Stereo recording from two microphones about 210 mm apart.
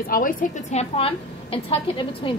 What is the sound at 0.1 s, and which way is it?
A woman's voice, 40° left (ahead or behind).